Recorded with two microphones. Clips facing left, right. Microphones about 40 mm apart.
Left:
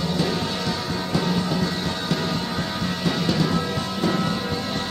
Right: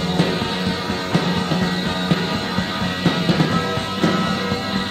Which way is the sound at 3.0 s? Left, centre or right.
Right.